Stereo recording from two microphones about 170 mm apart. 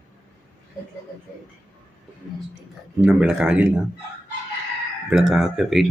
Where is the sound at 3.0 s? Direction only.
5° right (ahead or behind).